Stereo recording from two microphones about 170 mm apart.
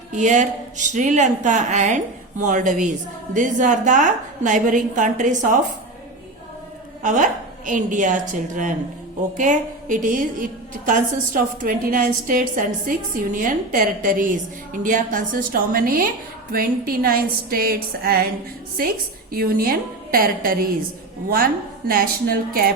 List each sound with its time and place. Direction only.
0.1 s a woman's voice: 45° right (ahead or behind)
7.0 s a woman's voice: 50° right (ahead or behind)